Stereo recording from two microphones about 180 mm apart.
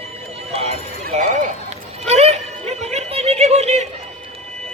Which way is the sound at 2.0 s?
35° right (ahead or behind).